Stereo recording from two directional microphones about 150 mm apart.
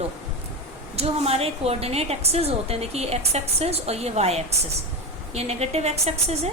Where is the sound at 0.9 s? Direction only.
40° right (ahead or behind).